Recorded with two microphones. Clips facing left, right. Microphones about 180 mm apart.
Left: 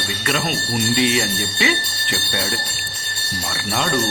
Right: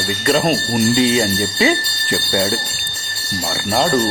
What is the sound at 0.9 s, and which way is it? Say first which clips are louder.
Speech: right 4 dB; 35° right (ahead or behind).